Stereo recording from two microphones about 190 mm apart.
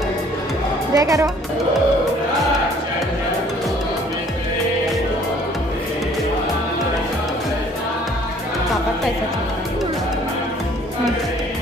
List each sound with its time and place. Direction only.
0.9 s speech: 15° right (ahead or behind)